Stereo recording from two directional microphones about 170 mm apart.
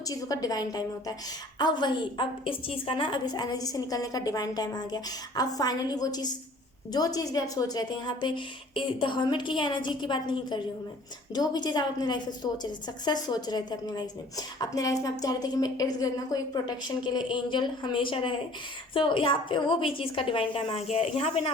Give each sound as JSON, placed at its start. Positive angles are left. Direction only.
{"t": 0.1, "sound": "a woman's voice", "side_deg": 20}